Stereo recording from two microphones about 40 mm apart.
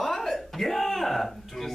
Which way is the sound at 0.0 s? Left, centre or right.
Centre.